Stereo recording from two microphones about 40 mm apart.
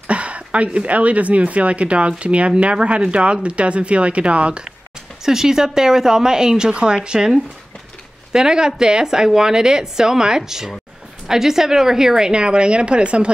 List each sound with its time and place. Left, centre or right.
0.1 s a woman's voice: right
5.2 s a woman's voice: centre; by 13.3 s right